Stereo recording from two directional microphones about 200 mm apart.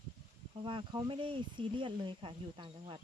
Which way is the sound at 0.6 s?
25° right (ahead or behind).